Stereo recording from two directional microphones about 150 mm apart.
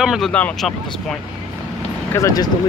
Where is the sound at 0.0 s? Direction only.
5° right (ahead or behind).